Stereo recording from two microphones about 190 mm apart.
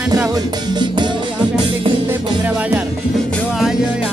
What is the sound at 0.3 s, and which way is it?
Music, 25° right (ahead or behind).